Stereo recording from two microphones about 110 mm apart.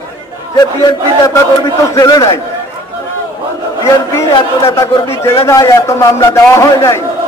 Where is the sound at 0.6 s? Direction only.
40° left (ahead or behind).